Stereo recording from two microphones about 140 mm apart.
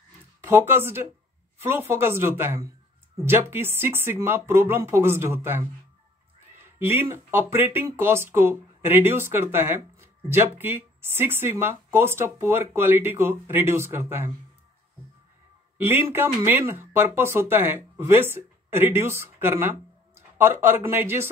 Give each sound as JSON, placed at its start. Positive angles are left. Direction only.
{"t": 0.4, "sound": "speech", "side_deg": -15}
{"t": 6.8, "sound": "speech", "side_deg": -15}
{"t": 15.8, "sound": "speech", "side_deg": -15}